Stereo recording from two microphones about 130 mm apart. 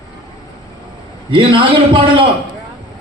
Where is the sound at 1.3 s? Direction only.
40° right (ahead or behind).